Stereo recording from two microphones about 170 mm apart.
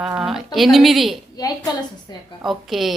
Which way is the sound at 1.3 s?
20° left (ahead or behind).